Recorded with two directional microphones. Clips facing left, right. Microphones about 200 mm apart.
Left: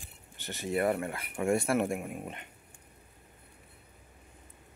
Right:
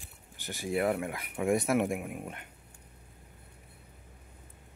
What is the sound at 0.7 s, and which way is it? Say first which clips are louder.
Speech: even; centre (ahead or behind).